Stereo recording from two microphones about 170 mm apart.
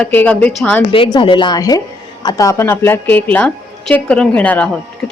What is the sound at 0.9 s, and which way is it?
Speech, 30° left (ahead or behind).